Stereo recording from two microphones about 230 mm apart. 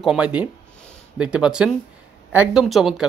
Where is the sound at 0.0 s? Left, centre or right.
Centre.